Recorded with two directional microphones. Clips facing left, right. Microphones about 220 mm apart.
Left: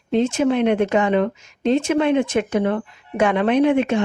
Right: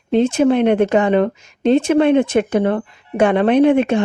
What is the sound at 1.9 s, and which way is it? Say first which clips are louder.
Speech: right 5 dB; 45° right (ahead or behind).